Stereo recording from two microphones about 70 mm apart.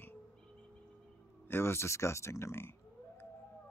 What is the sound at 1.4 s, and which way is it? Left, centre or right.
Speech, left.